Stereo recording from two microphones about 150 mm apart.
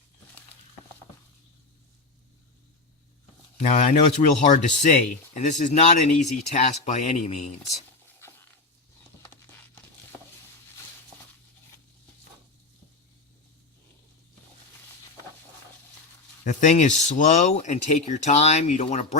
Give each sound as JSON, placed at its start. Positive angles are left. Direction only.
{"t": 3.6, "sound": "speech", "side_deg": 50}
{"t": 16.4, "sound": "speech", "side_deg": 55}